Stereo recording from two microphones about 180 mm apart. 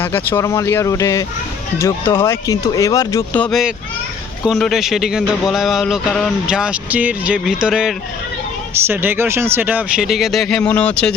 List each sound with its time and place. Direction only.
0.0 s speech: 10° left (ahead or behind)